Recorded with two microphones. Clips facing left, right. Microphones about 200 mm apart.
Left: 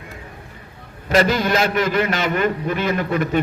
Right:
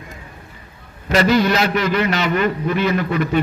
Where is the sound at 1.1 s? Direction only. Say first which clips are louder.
Right 2 dB; 50° left (ahead or behind).